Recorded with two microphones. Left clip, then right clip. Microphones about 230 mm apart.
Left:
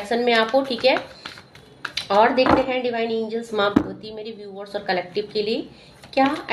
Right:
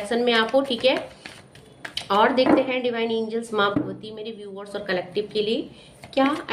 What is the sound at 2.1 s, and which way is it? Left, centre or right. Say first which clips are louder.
A woman's voice: left 2 dB; centre.